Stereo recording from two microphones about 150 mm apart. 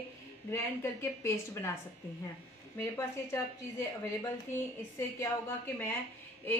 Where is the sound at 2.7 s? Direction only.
15° left (ahead or behind).